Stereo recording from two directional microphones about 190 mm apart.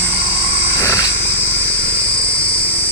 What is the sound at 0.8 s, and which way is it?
Wild animals, 15° left (ahead or behind).